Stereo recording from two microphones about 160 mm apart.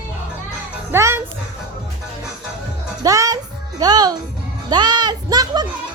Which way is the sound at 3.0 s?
20° right (ahead or behind).